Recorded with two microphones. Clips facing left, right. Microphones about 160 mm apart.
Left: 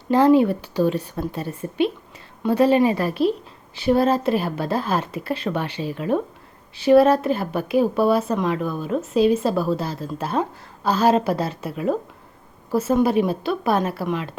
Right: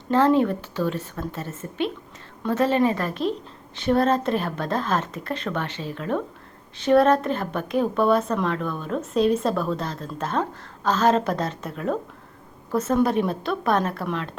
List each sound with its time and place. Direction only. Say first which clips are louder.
0.1 s a woman's voice: left 3 dB; 10° left (ahead or behind)